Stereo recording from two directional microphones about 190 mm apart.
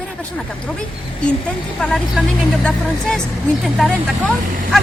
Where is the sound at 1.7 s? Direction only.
5° left (ahead or behind).